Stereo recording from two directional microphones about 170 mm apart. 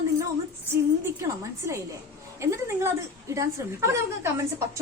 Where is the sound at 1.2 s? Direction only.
15° right (ahead or behind).